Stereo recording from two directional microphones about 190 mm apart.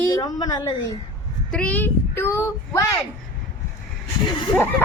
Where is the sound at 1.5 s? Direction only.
5° left (ahead or behind).